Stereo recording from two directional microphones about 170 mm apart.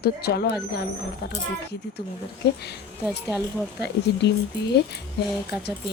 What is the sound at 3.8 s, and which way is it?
Speech, 80° left.